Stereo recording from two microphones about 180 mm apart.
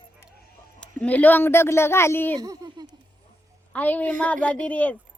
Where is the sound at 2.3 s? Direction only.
20° right (ahead or behind).